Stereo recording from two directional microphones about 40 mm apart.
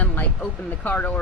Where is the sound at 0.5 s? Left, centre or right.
Left.